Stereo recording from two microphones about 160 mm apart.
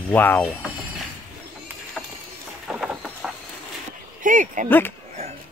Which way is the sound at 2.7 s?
5° right (ahead or behind).